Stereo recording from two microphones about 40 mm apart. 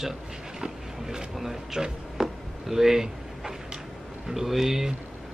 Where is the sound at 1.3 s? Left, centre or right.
Centre.